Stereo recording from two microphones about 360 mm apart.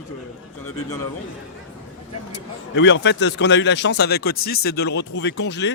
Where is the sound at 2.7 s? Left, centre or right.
Left.